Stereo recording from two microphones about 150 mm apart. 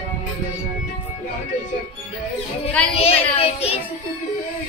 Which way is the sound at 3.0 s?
40° left (ahead or behind).